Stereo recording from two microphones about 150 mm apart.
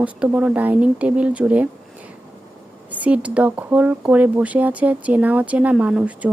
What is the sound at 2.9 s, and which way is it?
Speech, 10° right (ahead or behind).